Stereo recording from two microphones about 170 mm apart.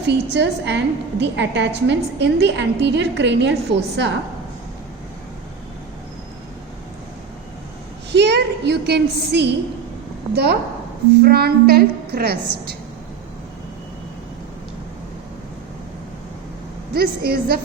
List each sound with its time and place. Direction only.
0.1 s a woman's voice: 85° right
8.1 s a sound: 90° right
10.3 s a woman's voice: 70° right (ahead or behind)
16.9 s a woman's voice: 65° right (ahead or behind)